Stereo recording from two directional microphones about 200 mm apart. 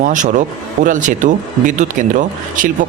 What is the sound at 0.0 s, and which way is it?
Speech, 40° right (ahead or behind).